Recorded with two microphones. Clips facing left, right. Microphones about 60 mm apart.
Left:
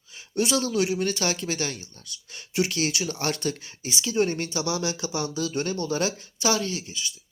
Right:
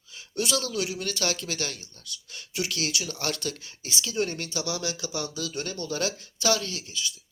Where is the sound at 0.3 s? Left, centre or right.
Left.